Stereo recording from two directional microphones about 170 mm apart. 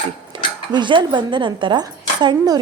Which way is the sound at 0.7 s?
25° right (ahead or behind).